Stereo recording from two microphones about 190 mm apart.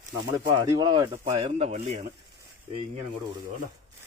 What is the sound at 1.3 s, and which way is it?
Speech, 30° right (ahead or behind).